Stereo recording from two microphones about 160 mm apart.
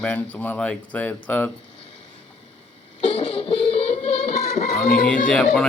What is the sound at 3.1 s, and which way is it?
Music, 35° left (ahead or behind).